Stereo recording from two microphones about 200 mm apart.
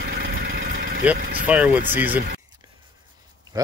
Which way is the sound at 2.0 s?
45° right (ahead or behind).